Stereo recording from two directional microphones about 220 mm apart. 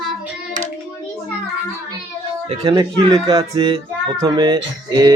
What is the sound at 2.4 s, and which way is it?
Speech, 20° right (ahead or behind).